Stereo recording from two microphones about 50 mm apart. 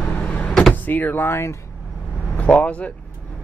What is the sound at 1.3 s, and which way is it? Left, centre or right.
Speech, left.